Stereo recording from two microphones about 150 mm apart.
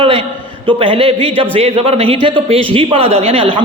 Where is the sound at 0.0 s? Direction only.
35° right (ahead or behind).